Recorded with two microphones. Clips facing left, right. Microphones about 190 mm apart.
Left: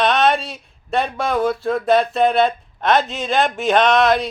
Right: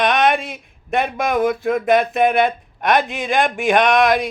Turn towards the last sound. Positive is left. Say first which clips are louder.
# even
turn(degrees=-15)  # may be behind; listen again after turning